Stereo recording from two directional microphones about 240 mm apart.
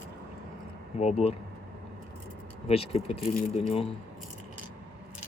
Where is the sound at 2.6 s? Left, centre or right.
Left.